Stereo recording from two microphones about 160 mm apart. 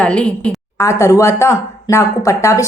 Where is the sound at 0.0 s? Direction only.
5° left (ahead or behind).